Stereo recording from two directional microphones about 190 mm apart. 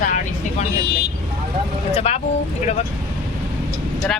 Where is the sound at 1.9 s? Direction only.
35° left (ahead or behind).